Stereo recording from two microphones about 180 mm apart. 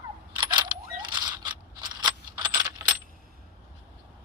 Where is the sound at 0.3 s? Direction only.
25° right (ahead or behind).